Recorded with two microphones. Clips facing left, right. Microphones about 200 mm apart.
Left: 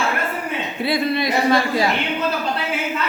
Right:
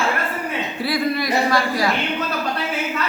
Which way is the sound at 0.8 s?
25° left (ahead or behind).